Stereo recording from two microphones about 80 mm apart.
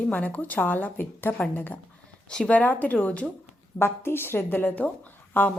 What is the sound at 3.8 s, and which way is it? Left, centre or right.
A woman's voice, left.